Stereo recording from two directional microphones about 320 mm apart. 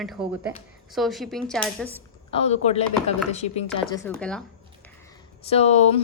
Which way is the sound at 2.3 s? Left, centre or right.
Centre.